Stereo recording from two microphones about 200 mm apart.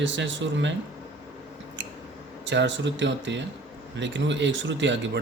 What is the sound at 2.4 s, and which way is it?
A man's voice, 65° right (ahead or behind).